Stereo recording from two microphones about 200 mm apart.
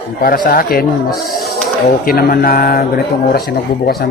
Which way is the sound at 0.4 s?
45° left (ahead or behind).